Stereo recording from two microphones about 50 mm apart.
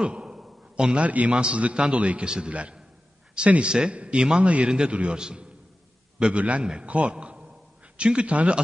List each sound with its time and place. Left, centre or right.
0.0 s a sound: centre
1.0 s a man's voice: right
6.3 s a man's voice: right
6.6 s a man's voice: centre